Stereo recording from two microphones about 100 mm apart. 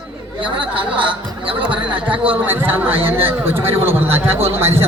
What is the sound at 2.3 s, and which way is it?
A man's voice, 20° right (ahead or behind).